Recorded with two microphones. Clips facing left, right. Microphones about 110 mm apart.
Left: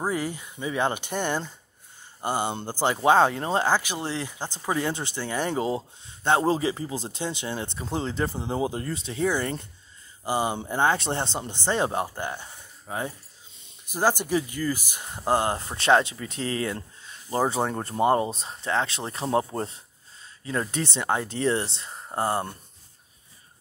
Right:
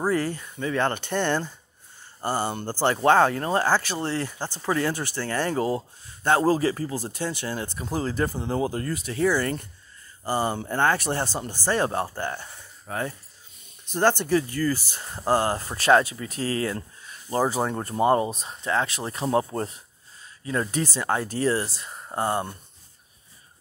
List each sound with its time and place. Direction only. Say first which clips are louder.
0.0 s speech: right 3 dB; 15° left (ahead or behind)